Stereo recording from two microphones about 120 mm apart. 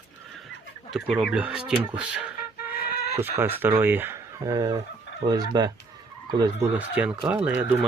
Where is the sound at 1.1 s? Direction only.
5° right (ahead or behind); by 4.7 s 30° right (ahead or behind).